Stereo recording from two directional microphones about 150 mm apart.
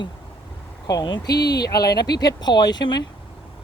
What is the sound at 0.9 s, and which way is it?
Speech, 25° left (ahead or behind).